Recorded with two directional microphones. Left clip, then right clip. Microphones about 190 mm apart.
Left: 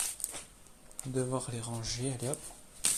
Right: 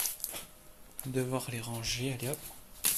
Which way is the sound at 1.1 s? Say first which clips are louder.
Even; 5° left (ahead or behind).